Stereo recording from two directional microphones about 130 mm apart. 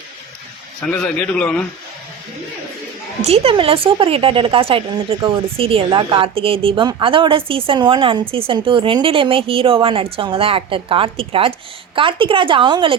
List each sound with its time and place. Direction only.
0.9 s a man's voice: 10° left (ahead or behind)
3.2 s a woman's voice: 50° right (ahead or behind)